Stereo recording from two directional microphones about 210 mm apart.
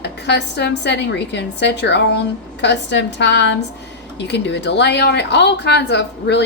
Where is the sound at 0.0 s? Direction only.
55° left (ahead or behind).